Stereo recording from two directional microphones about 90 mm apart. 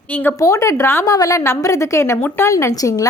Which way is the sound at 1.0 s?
40° left (ahead or behind).